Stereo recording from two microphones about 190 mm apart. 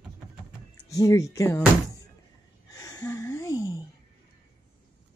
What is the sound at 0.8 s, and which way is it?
Speech, 15° left (ahead or behind).